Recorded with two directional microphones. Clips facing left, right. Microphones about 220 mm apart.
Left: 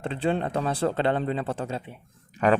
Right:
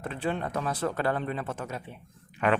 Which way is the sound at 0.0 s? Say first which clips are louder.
Left 5 dB; 30° left (ahead or behind).